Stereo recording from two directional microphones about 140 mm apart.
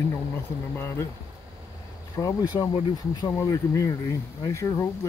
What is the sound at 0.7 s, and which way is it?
Speech, 20° left (ahead or behind).